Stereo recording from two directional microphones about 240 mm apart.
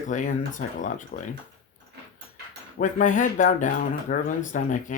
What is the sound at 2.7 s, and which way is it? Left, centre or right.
Speech, left.